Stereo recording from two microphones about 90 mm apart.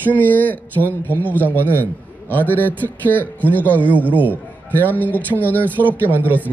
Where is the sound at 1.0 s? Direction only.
20° right (ahead or behind).